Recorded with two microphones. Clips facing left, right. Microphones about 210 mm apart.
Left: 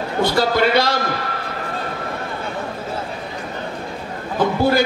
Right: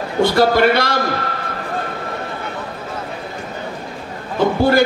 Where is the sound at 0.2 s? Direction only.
55° right (ahead or behind).